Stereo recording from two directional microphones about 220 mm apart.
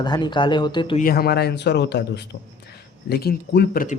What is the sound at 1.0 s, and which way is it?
A woman's voice, 40° left (ahead or behind).